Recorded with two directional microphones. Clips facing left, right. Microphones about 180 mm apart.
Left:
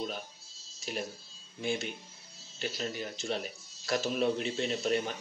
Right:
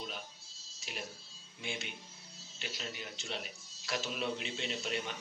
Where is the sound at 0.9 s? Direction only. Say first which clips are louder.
Left 8 dB; 40° left (ahead or behind).